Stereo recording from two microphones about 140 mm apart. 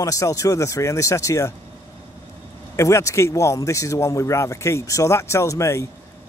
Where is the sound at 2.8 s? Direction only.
20° left (ahead or behind).